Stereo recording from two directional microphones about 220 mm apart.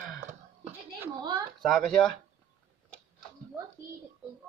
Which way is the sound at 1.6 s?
Centre (ahead or behind).